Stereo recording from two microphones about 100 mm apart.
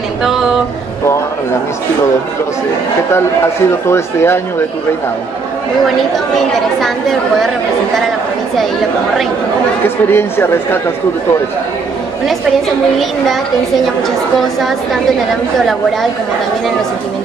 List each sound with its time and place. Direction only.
0.2 s speech: 5° right (ahead or behind)
3.8 s speech: 25° left (ahead or behind)
5.9 s speech: centre (ahead or behind)
9.8 s speech: 20° left (ahead or behind)
12.3 s speech: centre (ahead or behind)